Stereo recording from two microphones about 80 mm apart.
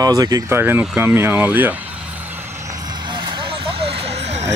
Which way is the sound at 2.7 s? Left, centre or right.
Right.